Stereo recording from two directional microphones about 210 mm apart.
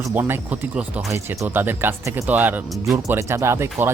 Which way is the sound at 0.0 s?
10° right (ahead or behind).